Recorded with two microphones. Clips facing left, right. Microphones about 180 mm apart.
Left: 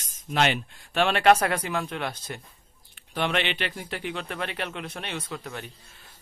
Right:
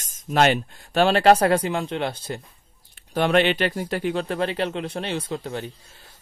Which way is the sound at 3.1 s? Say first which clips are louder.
Right 8 dB; 40° right (ahead or behind).